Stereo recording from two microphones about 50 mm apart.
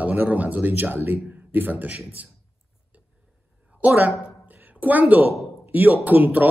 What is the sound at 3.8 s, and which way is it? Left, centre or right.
Speech, right.